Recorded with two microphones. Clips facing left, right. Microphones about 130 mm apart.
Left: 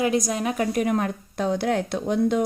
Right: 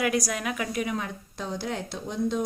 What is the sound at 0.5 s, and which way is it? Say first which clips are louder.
Speech: left 10 dB; 45° left (ahead or behind).